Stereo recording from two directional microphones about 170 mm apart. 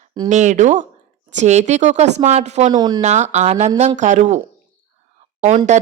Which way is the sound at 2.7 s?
25° right (ahead or behind).